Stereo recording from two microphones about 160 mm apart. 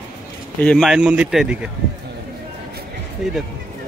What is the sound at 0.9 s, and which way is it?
Speech, 5° right (ahead or behind).